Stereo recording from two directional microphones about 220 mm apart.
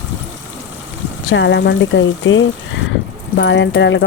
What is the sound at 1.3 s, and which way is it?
Speech, 55° left (ahead or behind).